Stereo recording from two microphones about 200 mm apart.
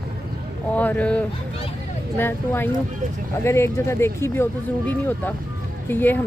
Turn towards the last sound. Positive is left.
turn(degrees=10)  # may be behind; listen again after turning